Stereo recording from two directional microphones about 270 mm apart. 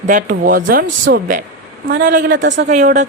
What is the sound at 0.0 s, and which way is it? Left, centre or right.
Speech, right.